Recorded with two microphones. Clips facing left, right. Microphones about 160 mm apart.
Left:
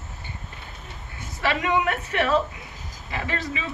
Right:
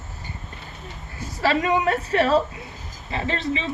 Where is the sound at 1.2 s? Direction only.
35° right (ahead or behind).